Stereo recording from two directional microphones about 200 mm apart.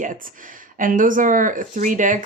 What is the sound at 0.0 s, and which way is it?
Speech, 40° right (ahead or behind).